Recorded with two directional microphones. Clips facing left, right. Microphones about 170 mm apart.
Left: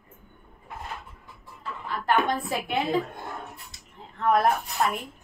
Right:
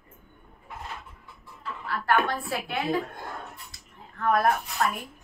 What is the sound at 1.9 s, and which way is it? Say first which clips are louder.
A woman's voice: left 1 dB; 20° left (ahead or behind).